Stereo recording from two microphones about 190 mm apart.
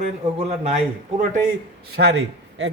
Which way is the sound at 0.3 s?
35° right (ahead or behind).